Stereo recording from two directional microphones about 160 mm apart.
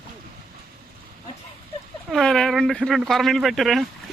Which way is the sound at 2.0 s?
Centre (ahead or behind).